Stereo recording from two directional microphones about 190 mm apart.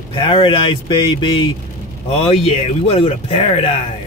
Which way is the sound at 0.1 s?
25° left (ahead or behind).